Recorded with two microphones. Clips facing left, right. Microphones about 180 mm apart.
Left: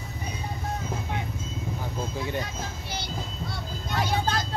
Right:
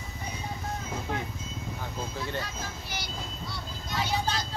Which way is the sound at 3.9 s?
55° left (ahead or behind).